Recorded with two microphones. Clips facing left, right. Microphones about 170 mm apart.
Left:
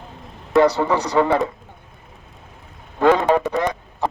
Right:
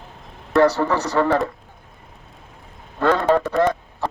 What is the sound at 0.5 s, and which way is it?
Speech, 15° left (ahead or behind).